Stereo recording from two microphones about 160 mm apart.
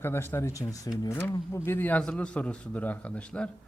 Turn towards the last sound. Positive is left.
turn(degrees=5)  # may be behind; listen again after turning